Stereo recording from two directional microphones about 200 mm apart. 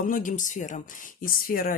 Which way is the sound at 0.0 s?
40° left (ahead or behind).